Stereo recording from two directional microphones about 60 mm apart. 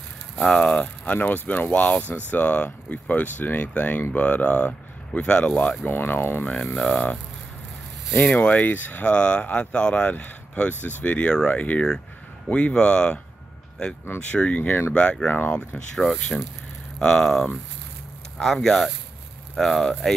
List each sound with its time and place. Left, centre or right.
0.6 s speech: centre
1.1 s speech: left; by 5.8 s centre
5.9 s speech: left
6.5 s speech: centre
8.2 s speech: left
10.2 s speech: left
14.3 s speech: left
15.5 s speech: centre
17.0 s speech: centre